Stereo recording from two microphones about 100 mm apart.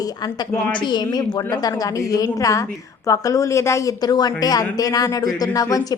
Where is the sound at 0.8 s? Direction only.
45° left (ahead or behind).